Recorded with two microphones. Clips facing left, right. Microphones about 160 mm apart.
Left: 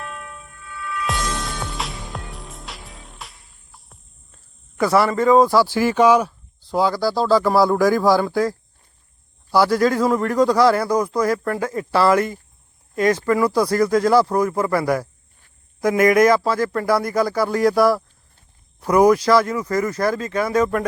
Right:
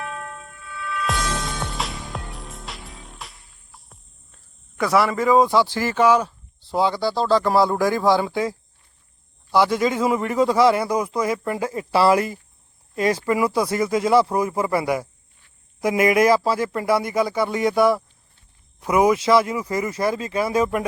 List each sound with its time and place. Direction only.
1.0 s music: centre (ahead or behind)
4.8 s a man's voice: centre (ahead or behind)
6.7 s a man's voice: centre (ahead or behind)
13.0 s speech: 30° right (ahead or behind)
13.2 s a man's voice: 5° right (ahead or behind)
15.9 s speech: 25° right (ahead or behind)
16.4 s a man's voice: 5° right (ahead or behind)